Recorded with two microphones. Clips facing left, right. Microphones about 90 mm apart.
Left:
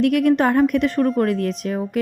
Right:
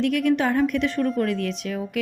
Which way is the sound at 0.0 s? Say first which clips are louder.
Left 5 dB; 55° left (ahead or behind).